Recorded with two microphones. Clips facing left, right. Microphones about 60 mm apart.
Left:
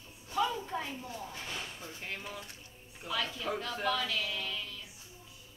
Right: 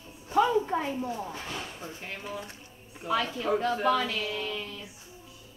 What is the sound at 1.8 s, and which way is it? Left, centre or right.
Speech, centre.